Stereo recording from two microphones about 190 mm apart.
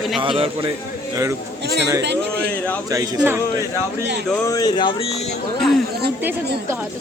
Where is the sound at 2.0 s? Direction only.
60° right (ahead or behind).